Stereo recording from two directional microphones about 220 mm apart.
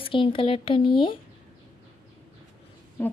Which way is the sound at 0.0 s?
25° left (ahead or behind).